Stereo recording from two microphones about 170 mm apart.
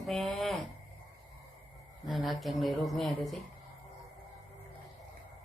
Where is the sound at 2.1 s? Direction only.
Centre (ahead or behind).